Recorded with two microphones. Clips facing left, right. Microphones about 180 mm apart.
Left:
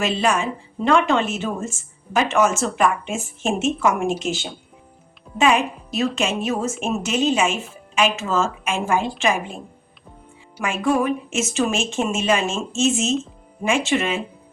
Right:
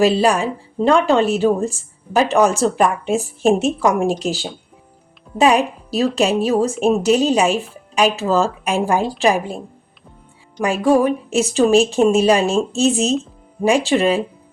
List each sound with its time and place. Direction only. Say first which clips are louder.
0.0 s speech: right 6 dB; 35° right (ahead or behind)
5.4 s speech: right 4 dB; 35° right (ahead or behind)
10.6 s speech: right 6 dB; 35° right (ahead or behind)